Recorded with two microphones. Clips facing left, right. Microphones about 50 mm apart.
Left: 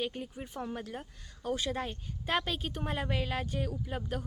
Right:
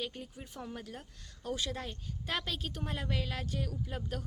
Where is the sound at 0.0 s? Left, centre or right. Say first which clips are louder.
Left 5 dB; left.